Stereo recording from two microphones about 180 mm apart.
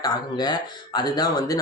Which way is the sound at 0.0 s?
25° left (ahead or behind).